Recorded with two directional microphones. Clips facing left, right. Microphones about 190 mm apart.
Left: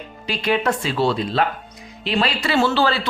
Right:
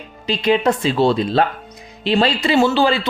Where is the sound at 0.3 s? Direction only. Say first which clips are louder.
Right 4 dB; 20° right (ahead or behind).